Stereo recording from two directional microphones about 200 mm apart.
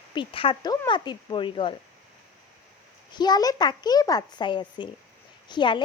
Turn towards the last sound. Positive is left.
turn(degrees=25)  # may be behind; listen again after turning